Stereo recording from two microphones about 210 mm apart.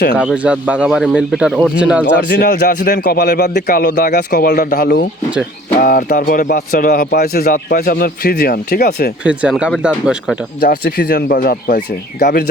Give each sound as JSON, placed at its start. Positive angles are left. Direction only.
{"t": 0.2, "sound": "speech", "side_deg": -5}
{"t": 2.1, "sound": "speech", "side_deg": 45}
{"t": 9.2, "sound": "speech", "side_deg": -5}
{"t": 10.6, "sound": "speech", "side_deg": 45}